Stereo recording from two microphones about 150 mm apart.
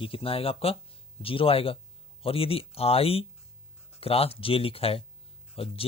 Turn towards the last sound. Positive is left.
turn(degrees=40)  # may be behind; listen again after turning